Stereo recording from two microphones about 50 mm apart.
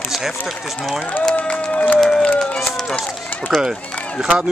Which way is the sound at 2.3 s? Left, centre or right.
Centre.